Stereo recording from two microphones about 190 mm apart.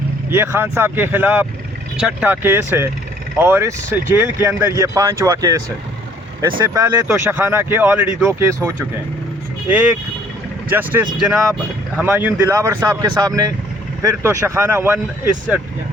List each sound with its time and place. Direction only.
0.3 s speech: 10° right (ahead or behind)
6.7 s speech: 10° right (ahead or behind)